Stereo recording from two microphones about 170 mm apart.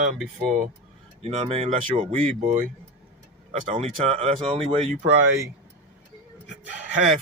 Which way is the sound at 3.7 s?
35° right (ahead or behind).